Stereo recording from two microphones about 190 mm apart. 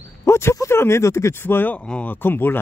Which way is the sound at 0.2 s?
15° left (ahead or behind).